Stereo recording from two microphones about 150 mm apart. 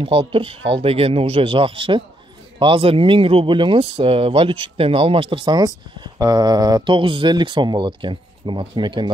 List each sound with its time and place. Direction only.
0.0 s speech: 35° right (ahead or behind)